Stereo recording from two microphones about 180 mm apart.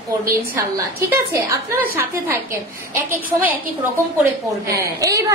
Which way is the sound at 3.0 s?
10° right (ahead or behind).